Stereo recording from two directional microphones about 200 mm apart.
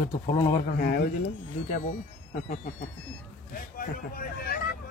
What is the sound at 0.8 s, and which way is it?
Speech, 50° left (ahead or behind).